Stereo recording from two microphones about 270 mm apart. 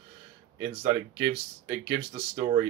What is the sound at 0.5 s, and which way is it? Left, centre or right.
Speech, centre.